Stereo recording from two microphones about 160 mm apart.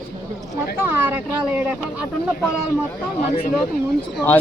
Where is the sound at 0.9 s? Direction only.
10° right (ahead or behind).